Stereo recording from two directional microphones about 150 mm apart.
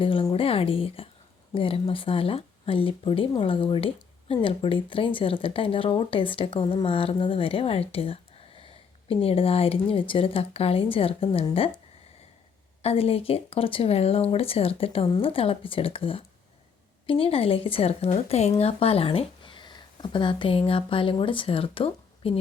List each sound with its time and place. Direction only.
0.0 s speech: 35° left (ahead or behind)
12.8 s speech: 40° left (ahead or behind)